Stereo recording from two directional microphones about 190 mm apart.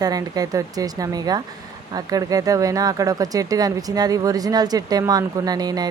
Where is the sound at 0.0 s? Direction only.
20° right (ahead or behind).